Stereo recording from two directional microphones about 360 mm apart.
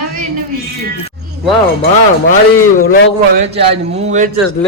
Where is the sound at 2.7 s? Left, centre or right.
Left.